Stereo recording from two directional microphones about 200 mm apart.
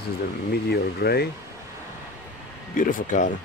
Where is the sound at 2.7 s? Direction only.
45° left (ahead or behind).